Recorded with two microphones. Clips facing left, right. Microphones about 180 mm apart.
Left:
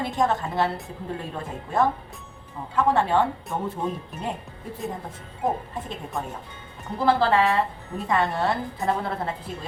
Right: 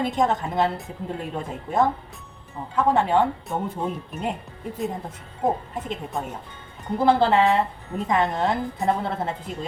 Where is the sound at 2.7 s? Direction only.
15° right (ahead or behind).